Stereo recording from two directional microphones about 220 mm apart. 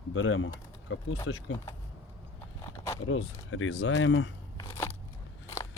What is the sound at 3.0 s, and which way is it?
Speech, 65° left (ahead or behind).